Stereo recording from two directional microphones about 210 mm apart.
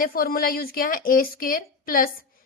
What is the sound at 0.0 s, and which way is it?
A woman's voice, 45° left (ahead or behind).